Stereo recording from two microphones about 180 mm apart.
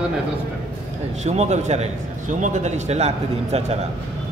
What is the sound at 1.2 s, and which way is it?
A man's voice, 40° right (ahead or behind).